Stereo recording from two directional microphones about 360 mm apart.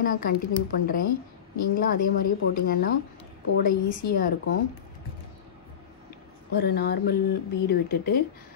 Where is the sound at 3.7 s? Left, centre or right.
Left.